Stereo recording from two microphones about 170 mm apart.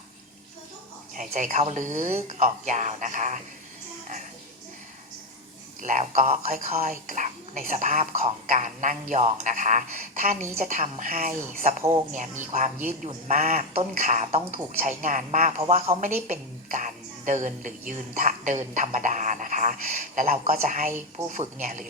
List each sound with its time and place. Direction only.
1.1 s speech: 50° right (ahead or behind)
5.8 s a man's voice: 45° right (ahead or behind)